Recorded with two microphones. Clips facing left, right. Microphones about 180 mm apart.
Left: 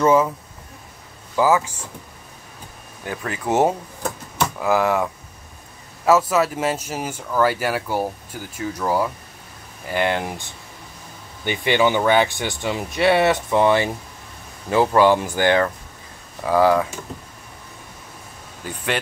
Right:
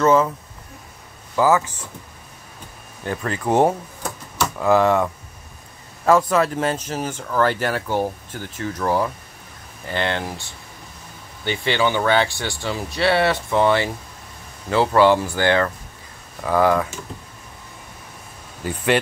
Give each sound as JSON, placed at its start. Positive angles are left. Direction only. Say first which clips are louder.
{"t": 0.0, "sound": "speech", "louder": "even", "side_deg": 10}
{"t": 1.3, "sound": "speech", "louder": "even", "side_deg": 10}
{"t": 3.1, "sound": "speech", "louder": "right 2 dB", "side_deg": 5}
{"t": 14.9, "sound": "speech", "louder": "right 2 dB", "side_deg": 15}
{"t": 18.6, "sound": "speech", "louder": "right 6 dB", "side_deg": -5}